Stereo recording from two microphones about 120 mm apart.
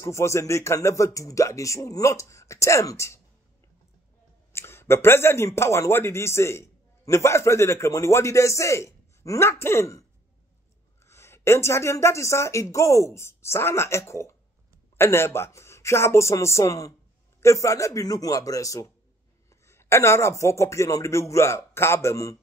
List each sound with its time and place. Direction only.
0.0 s speech: 25° left (ahead or behind)
4.5 s speech: 20° left (ahead or behind)
11.1 s speech: 20° left (ahead or behind)